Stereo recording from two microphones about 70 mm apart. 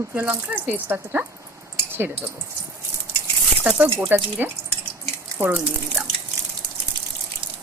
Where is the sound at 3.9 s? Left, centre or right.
Right.